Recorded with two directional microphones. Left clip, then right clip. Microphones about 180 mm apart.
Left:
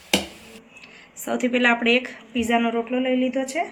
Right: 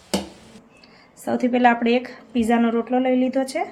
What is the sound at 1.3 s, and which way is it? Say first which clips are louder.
A woman's voice: right 2 dB; 50° right (ahead or behind).